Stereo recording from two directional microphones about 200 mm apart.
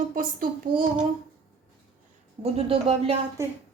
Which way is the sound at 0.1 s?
45° right (ahead or behind).